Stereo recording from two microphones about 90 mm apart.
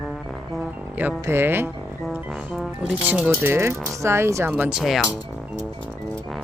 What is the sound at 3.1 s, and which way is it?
Speech, 20° right (ahead or behind).